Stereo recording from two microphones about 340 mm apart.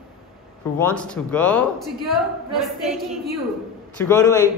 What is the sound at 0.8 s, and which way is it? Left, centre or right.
Speech, centre.